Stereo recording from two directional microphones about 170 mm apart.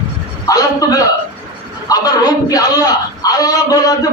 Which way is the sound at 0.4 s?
20° left (ahead or behind).